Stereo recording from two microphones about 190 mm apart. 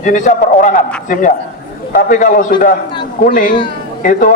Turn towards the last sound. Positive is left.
turn(degrees=45)  # may be behind; listen again after turning